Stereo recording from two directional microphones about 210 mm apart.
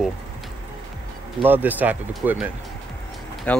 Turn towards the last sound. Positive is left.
turn(degrees=5)  # may be behind; listen again after turning